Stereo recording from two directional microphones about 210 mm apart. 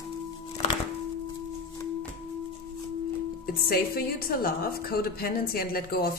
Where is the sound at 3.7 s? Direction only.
45° left (ahead or behind).